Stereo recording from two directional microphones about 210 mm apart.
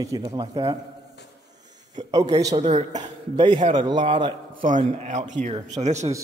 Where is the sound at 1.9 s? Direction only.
30° right (ahead or behind).